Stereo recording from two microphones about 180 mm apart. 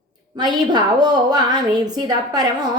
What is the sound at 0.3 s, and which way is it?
A woman's voice, 25° right (ahead or behind).